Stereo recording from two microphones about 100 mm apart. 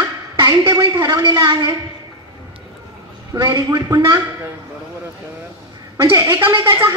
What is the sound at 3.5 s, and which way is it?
Speech, 40° right (ahead or behind).